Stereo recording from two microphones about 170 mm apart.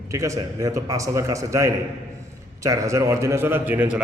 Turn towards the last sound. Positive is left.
turn(degrees=-10)  # may be behind; listen again after turning